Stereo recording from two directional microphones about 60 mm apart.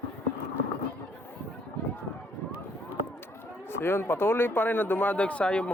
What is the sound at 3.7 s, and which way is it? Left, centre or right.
Speech, left.